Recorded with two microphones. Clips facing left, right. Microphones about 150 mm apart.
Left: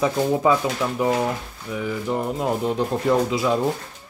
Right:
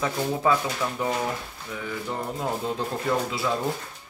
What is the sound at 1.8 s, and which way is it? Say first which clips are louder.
Speech: left 6 dB; 20° left (ahead or behind).